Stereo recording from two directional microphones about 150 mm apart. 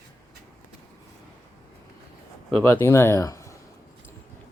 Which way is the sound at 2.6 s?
15° left (ahead or behind).